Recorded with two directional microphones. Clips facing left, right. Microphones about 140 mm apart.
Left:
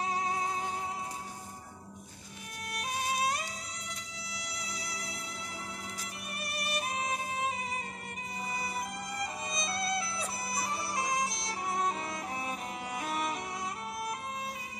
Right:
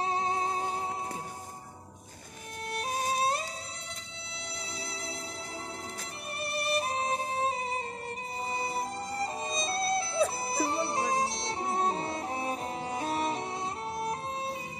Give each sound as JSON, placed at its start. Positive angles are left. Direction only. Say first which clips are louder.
{"t": 0.0, "sound": "music", "louder": "right 3 dB", "side_deg": -30}
{"t": 2.8, "sound": "music", "louder": "right 3 dB", "side_deg": -40}
{"t": 4.6, "sound": "music", "louder": "right 3 dB", "side_deg": -30}
{"t": 6.4, "sound": "music", "louder": "right 6 dB", "side_deg": -30}